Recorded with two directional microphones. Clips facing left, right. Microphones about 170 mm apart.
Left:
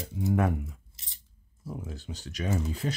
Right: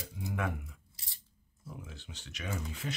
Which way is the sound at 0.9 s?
20° left (ahead or behind).